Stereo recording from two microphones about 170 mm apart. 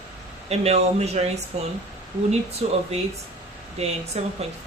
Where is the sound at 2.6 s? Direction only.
35° right (ahead or behind).